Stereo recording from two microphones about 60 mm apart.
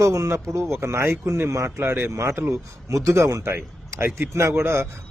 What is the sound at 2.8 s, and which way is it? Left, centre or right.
Speech, right.